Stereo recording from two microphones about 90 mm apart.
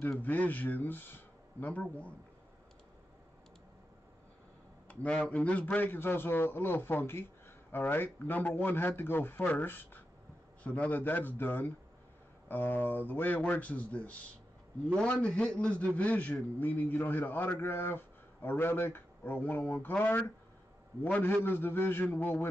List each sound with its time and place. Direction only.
0.2 s a man's voice: 20° left (ahead or behind)
4.8 s a man's voice: 15° left (ahead or behind)